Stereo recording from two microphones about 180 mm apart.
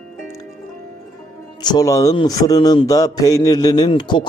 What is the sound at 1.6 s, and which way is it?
Speech, 20° left (ahead or behind).